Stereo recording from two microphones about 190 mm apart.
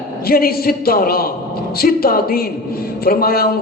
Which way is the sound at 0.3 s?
50° left (ahead or behind).